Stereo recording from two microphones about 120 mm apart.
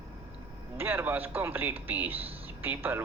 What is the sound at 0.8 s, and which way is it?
A man's voice, 15° right (ahead or behind).